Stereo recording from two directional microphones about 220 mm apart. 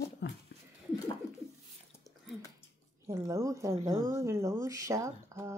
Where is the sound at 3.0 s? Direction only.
15° right (ahead or behind).